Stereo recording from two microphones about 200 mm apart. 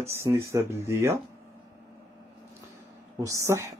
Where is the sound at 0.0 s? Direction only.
15° right (ahead or behind).